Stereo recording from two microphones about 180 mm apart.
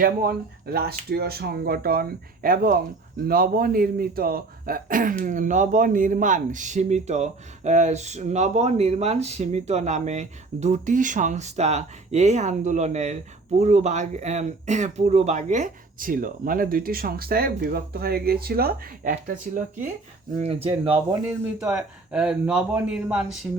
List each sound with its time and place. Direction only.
0.0 s a man's voice: 55° right (ahead or behind)
20.4 s a man's voice: 35° right (ahead or behind)
21.2 s speech: 10° right (ahead or behind)